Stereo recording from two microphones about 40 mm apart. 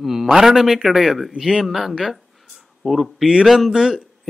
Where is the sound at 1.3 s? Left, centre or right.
Centre.